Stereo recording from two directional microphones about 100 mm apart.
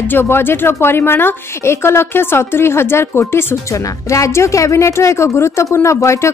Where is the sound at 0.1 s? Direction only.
20° left (ahead or behind).